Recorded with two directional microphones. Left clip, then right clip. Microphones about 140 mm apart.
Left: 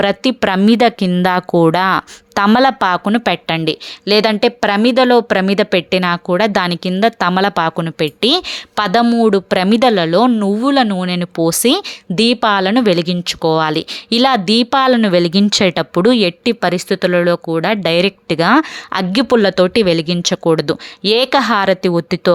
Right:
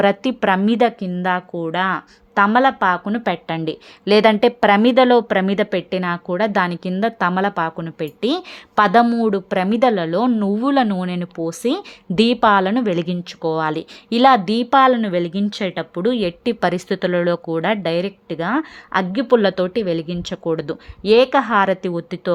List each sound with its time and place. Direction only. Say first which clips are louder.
0.0 s speech: left 2 dB; 15° left (ahead or behind); by 2.0 s 55° left (ahead or behind)
2.0 s speech: left 1 dB; 35° left (ahead or behind); by 3.8 s 20° left (ahead or behind)
4.0 s a woman's voice: left 1 dB; 5° left (ahead or behind); by 11.8 s 30° left (ahead or behind)
12.1 s a woman's voice: left 1 dB; 15° left (ahead or behind)
15.0 s speech: left 8 dB; 40° left (ahead or behind)
16.2 s a woman's voice: left 5 dB; 20° left (ahead or behind)
21.8 s speech: left 9 dB; 35° left (ahead or behind)